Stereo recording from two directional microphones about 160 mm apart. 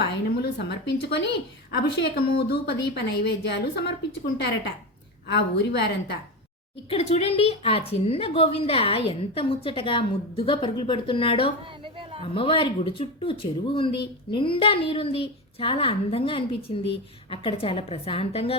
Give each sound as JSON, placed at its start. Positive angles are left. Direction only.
{"t": 0.4, "sound": "a woman's voice", "side_deg": 90}
{"t": 6.9, "sound": "a woman's voice", "side_deg": 40}